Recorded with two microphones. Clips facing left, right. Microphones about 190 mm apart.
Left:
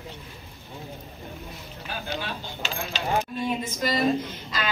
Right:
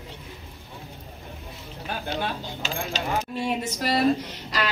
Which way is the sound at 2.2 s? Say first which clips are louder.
Right 4 dB; 40° right (ahead or behind).